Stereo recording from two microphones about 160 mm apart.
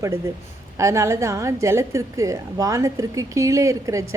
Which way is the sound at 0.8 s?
20° right (ahead or behind).